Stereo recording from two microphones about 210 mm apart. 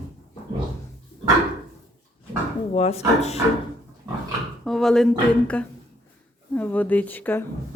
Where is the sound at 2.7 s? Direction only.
30° left (ahead or behind).